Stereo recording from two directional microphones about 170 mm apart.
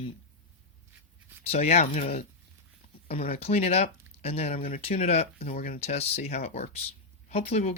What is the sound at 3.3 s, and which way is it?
Speech, 40° left (ahead or behind).